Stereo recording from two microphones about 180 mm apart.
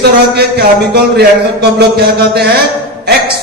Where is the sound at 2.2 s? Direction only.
65° right (ahead or behind).